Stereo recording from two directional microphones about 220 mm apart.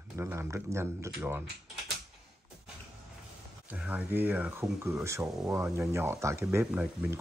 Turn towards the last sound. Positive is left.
turn(degrees=-10)  # may be behind; listen again after turning